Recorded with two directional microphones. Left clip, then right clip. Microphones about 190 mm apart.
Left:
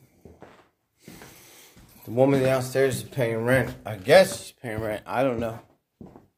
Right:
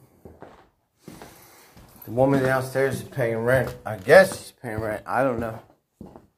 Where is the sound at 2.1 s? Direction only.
25° left (ahead or behind).